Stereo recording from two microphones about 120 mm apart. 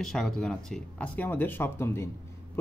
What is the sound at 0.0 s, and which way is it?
Speech, 5° left (ahead or behind).